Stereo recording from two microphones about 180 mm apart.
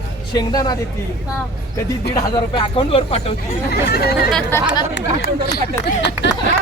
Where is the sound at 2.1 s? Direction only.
30° left (ahead or behind).